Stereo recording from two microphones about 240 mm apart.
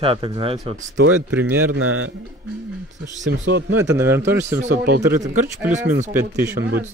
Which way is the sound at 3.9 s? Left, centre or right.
Centre.